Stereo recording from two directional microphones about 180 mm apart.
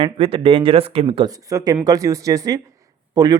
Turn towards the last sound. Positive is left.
turn(degrees=-20)  # may be behind; listen again after turning